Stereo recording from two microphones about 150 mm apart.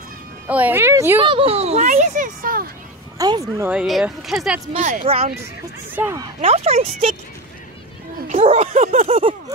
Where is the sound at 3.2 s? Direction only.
25° right (ahead or behind).